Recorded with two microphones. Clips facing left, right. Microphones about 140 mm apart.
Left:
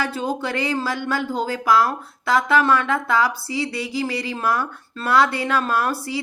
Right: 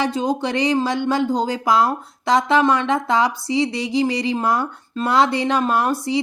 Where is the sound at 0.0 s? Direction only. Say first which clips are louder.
Right 4 dB; 20° right (ahead or behind).